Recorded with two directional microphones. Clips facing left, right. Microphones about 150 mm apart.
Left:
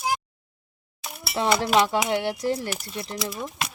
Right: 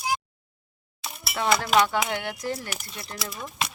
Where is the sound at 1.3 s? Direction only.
30° left (ahead or behind).